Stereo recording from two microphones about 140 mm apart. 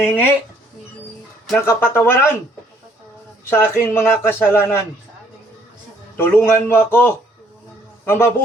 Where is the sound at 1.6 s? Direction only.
20° left (ahead or behind).